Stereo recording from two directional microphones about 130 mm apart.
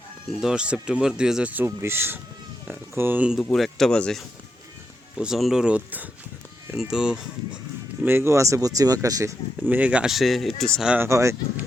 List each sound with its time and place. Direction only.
0.3 s speech: 5° right (ahead or behind)
3.4 s speech: 5° left (ahead or behind)
8.0 s speech: 20° right (ahead or behind)
9.6 s speech: 15° right (ahead or behind)
11.0 s speech: 20° right (ahead or behind)